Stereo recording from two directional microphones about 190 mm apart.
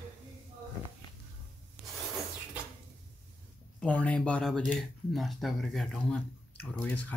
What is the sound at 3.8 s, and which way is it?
Speech, 5° left (ahead or behind).